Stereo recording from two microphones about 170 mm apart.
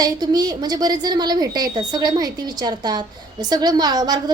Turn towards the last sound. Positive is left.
turn(degrees=-25)  # may be behind; listen again after turning